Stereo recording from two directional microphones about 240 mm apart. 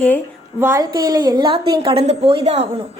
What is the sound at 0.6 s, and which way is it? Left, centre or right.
A woman's voice, centre.